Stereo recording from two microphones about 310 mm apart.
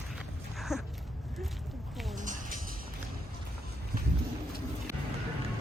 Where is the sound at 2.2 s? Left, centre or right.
Right.